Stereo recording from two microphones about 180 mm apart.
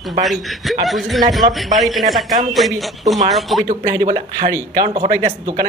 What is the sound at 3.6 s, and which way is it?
Speech, 45° right (ahead or behind).